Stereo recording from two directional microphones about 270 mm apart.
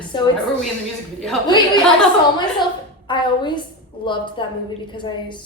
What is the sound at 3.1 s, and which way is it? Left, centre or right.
A woman's voice, centre.